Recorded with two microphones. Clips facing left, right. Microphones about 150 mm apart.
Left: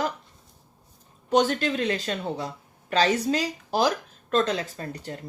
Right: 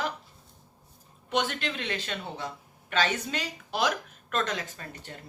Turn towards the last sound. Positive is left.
turn(degrees=40)  # may be behind; listen again after turning